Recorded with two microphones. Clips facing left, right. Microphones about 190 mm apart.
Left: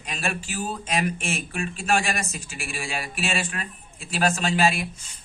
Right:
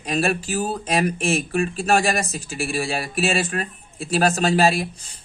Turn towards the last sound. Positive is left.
turn(degrees=-35)  # may be behind; listen again after turning